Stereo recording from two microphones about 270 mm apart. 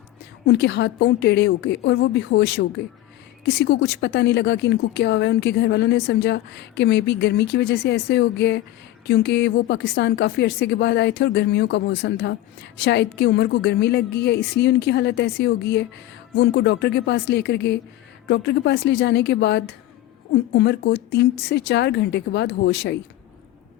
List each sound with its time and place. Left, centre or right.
0.4 s a woman's voice: left